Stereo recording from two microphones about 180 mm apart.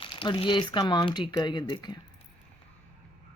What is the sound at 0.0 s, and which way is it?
Speech, 30° left (ahead or behind).